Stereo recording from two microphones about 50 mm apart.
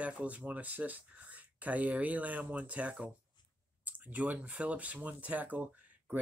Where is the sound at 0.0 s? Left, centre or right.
Right.